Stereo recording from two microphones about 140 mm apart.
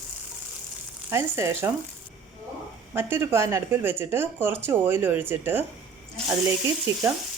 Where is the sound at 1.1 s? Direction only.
20° right (ahead or behind).